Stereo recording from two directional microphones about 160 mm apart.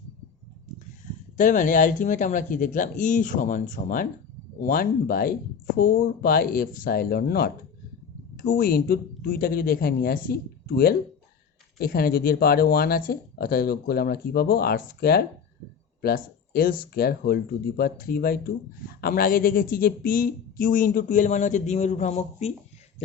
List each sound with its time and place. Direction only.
1.4 s speech: 55° left (ahead or behind)